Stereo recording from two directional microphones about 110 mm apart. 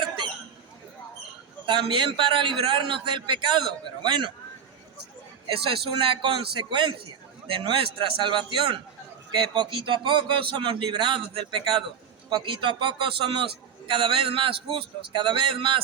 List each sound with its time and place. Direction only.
1.6 s a man's voice: 50° right (ahead or behind)
5.5 s a man's voice: 50° right (ahead or behind)